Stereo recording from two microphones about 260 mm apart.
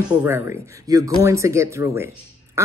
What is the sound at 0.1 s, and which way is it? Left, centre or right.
Speech, centre.